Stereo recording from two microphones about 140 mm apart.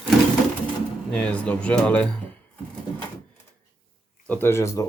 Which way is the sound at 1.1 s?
10° left (ahead or behind).